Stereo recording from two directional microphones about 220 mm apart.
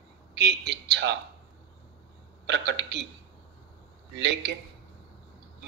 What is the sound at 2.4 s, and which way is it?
Speech, 50° right (ahead or behind).